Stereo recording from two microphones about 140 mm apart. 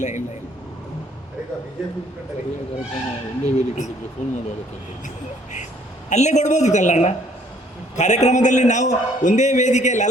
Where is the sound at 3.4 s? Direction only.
55° left (ahead or behind).